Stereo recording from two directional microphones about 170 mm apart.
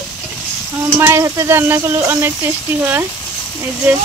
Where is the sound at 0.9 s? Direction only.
15° right (ahead or behind).